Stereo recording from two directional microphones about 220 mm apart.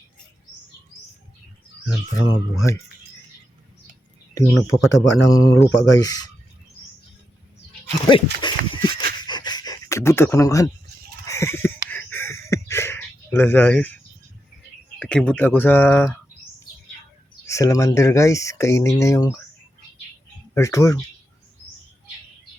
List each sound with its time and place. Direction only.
2.1 s speech: 15° left (ahead or behind)
4.9 s speech: 15° left (ahead or behind)
8.1 s speech: 20° left (ahead or behind)
9.1 s a sound: 20° left (ahead or behind)
14.9 s speech: 5° left (ahead or behind)
17.4 s speech: 15° left (ahead or behind)
20.5 s speech: 15° left (ahead or behind)